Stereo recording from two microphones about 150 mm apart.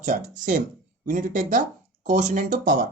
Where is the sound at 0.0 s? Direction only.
60° right (ahead or behind).